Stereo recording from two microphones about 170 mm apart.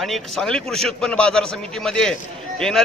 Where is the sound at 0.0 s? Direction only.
Centre (ahead or behind).